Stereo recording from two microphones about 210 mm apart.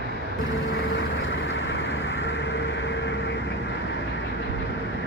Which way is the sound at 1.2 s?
55° left (ahead or behind).